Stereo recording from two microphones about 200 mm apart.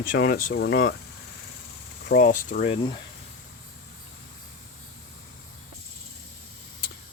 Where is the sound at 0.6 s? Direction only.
55° left (ahead or behind).